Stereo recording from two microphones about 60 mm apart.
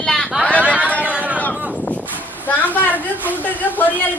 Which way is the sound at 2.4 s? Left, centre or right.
Left.